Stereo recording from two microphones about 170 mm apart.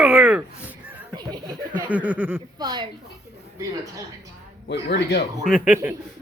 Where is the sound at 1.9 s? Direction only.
10° right (ahead or behind).